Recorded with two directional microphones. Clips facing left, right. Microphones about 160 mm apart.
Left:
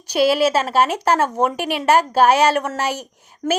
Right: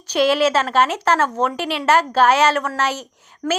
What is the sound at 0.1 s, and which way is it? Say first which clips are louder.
A woman's voice: even; 10° left (ahead or behind).